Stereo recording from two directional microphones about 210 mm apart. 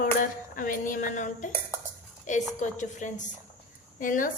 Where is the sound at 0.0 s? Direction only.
40° left (ahead or behind).